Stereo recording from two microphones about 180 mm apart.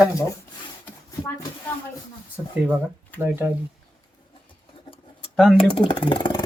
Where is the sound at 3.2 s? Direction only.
10° right (ahead or behind).